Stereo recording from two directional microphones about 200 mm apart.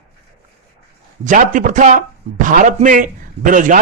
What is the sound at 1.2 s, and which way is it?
A man's voice, 40° right (ahead or behind).